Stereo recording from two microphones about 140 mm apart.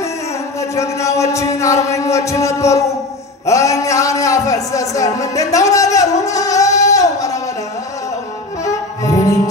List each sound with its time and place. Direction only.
0.6 s a man's voice: 20° left (ahead or behind)
6.2 s music: 25° left (ahead or behind)
8.6 s music: 25° left (ahead or behind)